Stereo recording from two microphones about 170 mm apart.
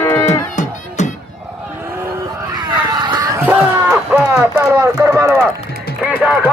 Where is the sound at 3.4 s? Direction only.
10° right (ahead or behind).